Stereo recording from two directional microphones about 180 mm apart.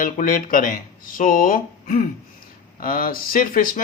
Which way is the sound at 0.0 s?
50° left (ahead or behind).